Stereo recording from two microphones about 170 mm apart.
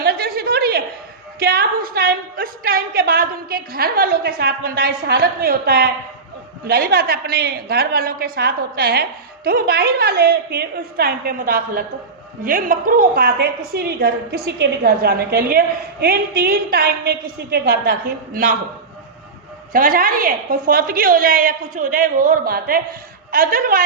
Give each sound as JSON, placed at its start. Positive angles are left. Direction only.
{"t": 0.0, "sound": "a sound", "side_deg": -65}
{"t": 6.7, "sound": "a woman's voice", "side_deg": -65}
{"t": 19.7, "sound": "a woman's voice", "side_deg": -55}